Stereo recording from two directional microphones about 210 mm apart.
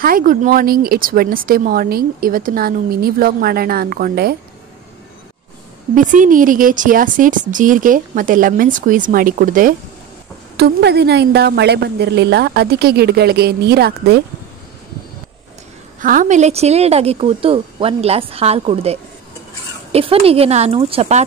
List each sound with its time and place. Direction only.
0.0 s speech: 40° right (ahead or behind)
5.9 s speech: 40° right (ahead or behind)
16.0 s a woman's voice: 40° right (ahead or behind)